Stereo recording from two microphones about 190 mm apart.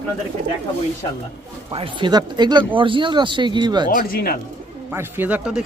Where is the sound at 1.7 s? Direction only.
25° right (ahead or behind).